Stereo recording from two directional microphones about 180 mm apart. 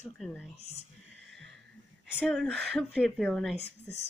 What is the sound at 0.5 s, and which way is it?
Speech, 35° left (ahead or behind).